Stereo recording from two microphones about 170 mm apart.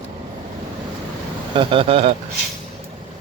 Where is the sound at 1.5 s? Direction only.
30° right (ahead or behind).